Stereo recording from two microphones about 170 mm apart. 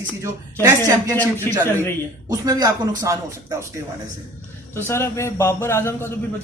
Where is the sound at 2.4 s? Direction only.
20° right (ahead or behind).